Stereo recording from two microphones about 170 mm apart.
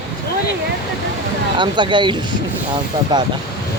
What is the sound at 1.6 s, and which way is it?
Speech, 30° right (ahead or behind).